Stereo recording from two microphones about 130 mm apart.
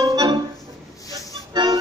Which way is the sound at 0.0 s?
30° right (ahead or behind).